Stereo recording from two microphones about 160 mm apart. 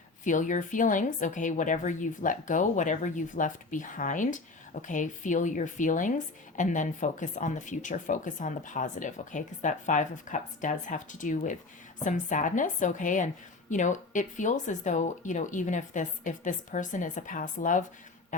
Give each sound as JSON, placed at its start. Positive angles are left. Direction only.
{"t": 0.3, "sound": "a woman's voice", "side_deg": 50}